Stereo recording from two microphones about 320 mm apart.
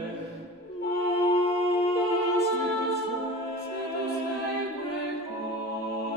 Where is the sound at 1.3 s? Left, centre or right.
Centre.